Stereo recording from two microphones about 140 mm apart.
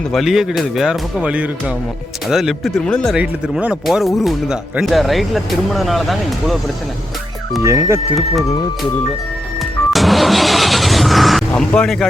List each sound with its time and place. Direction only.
0.1 s speech: centre (ahead or behind)
3.2 s speech: 5° right (ahead or behind)
7.6 s speech: 20° right (ahead or behind)
8.1 s speech: centre (ahead or behind)
9.9 s vehicle: centre (ahead or behind)